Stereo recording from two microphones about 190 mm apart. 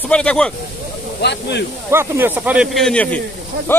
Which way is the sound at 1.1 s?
60° left (ahead or behind).